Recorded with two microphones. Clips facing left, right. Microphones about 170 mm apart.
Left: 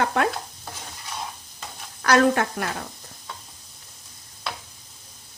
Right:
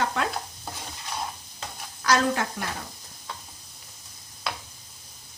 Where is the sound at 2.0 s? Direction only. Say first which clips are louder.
Left 5 dB; 60° left (ahead or behind).